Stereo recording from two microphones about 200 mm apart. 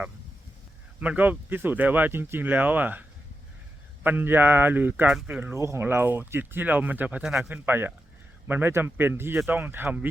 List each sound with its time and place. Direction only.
0.9 s speech: 10° right (ahead or behind)
4.0 s speech: 10° right (ahead or behind)